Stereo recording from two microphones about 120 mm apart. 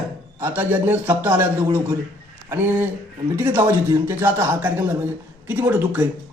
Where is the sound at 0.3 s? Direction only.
15° right (ahead or behind).